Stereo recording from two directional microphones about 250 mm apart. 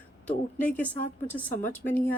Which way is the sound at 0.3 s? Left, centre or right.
Centre.